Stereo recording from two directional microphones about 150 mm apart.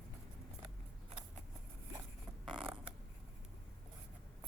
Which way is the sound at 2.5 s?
35° right (ahead or behind).